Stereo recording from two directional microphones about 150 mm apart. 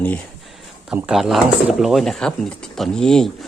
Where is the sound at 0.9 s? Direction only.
5° right (ahead or behind).